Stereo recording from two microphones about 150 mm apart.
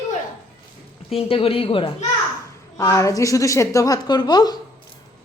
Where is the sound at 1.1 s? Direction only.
40° left (ahead or behind).